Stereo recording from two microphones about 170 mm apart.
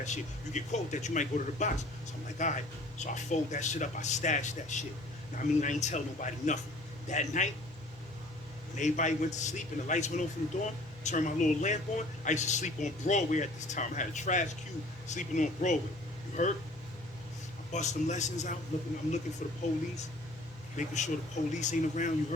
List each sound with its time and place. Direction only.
0.0 s a man's voice: 45° left (ahead or behind)
8.7 s a man's voice: 45° left (ahead or behind)
17.7 s a man's voice: 45° left (ahead or behind)
20.7 s a man's voice: 45° left (ahead or behind)